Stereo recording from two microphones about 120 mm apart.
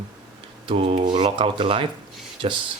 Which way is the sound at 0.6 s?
50° right (ahead or behind).